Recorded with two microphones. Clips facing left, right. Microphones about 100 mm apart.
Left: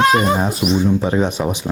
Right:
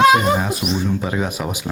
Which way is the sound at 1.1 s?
25° left (ahead or behind).